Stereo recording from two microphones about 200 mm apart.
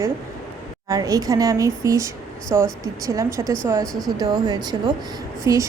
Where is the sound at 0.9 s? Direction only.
15° right (ahead or behind).